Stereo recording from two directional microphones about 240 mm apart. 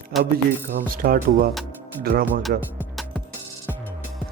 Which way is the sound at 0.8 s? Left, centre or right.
Right.